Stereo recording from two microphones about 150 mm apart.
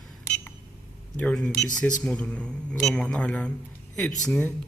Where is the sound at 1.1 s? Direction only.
5° left (ahead or behind).